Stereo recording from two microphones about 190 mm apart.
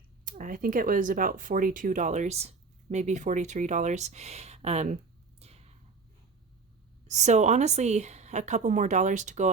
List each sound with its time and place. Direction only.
0.3 s speech: 45° right (ahead or behind)
5.4 s a sound: 35° right (ahead or behind)
7.1 s speech: 40° right (ahead or behind)